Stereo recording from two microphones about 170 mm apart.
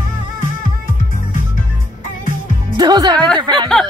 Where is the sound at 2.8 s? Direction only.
25° right (ahead or behind).